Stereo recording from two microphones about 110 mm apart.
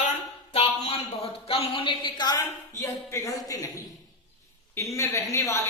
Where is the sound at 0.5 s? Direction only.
65° left (ahead or behind).